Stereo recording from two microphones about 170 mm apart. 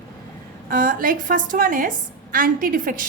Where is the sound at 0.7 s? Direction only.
55° right (ahead or behind).